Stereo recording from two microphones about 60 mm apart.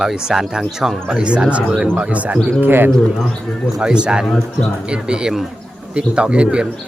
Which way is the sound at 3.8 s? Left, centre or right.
Centre.